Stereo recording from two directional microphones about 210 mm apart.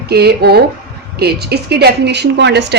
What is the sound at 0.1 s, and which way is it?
A woman's voice, 50° right (ahead or behind).